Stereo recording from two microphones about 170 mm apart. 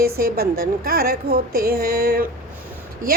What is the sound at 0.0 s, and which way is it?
A woman's voice, 60° right (ahead or behind).